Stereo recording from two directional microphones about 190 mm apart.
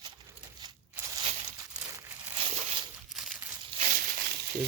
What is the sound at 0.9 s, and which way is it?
Crushing, 15° right (ahead or behind).